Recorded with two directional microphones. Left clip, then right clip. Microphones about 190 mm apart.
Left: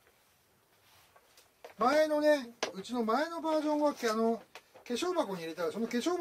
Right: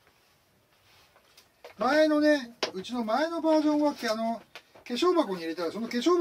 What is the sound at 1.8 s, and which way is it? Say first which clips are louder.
Speech: right 4 dB; 50° left (ahead or behind).